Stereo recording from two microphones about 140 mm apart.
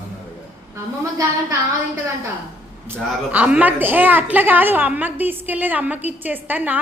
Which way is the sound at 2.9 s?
10° right (ahead or behind).